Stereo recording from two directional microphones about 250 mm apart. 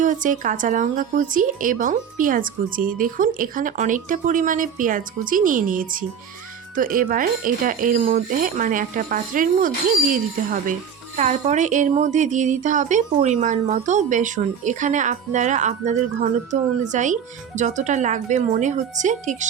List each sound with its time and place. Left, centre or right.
0.0 s speech: right